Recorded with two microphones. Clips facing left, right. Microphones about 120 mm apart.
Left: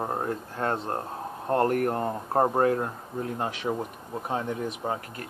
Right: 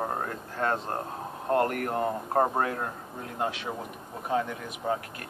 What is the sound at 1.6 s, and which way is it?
Speech, 35° left (ahead or behind).